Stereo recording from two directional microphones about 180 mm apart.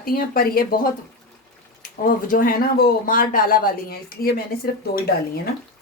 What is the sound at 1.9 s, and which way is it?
Speech, 50° left (ahead or behind).